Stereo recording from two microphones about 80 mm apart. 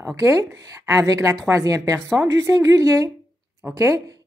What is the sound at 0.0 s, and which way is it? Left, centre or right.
A woman's voice, right.